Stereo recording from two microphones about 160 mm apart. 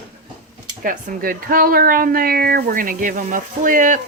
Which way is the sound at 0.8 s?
60° right (ahead or behind).